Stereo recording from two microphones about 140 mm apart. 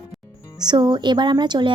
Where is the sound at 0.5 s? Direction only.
30° right (ahead or behind).